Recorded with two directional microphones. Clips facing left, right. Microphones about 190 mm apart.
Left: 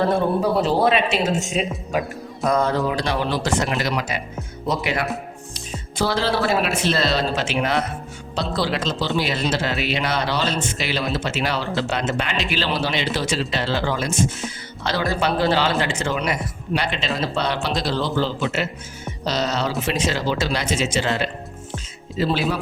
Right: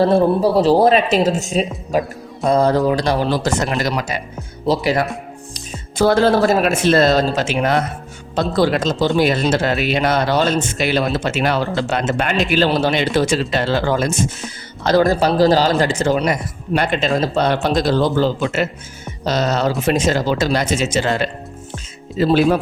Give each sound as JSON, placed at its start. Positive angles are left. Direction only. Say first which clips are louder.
{"t": 0.0, "sound": "speech", "louder": "right 6 dB", "side_deg": -30}
{"t": 5.5, "sound": "speech", "louder": "right 6 dB", "side_deg": -50}